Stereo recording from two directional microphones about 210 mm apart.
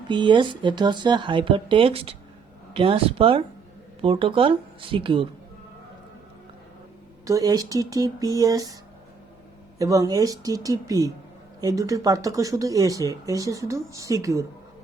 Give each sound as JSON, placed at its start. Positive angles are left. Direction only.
{"t": 0.1, "sound": "speech", "side_deg": -20}
{"t": 7.3, "sound": "speech", "side_deg": -15}
{"t": 9.7, "sound": "speech", "side_deg": -15}